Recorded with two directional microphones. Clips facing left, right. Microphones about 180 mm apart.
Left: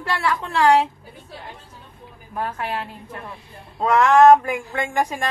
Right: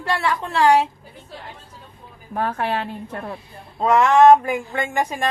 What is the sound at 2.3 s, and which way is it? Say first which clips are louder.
A woman's voice: right 4 dB; 65° right (ahead or behind).